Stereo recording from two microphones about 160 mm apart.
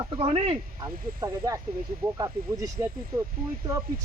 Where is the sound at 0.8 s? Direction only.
20° right (ahead or behind).